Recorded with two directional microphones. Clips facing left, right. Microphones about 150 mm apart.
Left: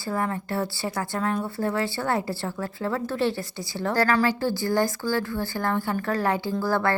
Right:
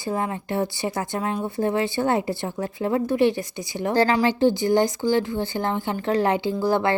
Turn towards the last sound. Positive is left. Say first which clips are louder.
# right 3 dB
turn(degrees=-20)  # may be behind; listen again after turning